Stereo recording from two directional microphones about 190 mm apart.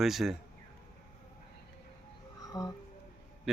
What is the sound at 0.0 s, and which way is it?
Speech, centre (ahead or behind).